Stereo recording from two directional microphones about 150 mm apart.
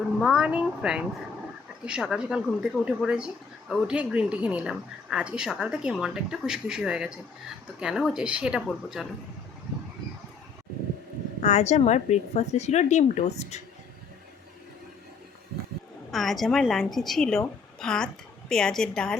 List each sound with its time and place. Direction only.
0.2 s a woman's voice: 5° right (ahead or behind)
11.4 s a woman's voice: 50° left (ahead or behind)
16.1 s a woman's voice: centre (ahead or behind)